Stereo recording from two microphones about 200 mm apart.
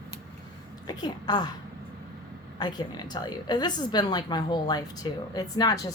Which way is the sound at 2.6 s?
20° left (ahead or behind).